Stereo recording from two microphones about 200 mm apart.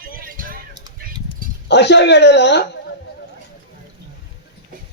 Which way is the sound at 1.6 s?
60° left (ahead or behind).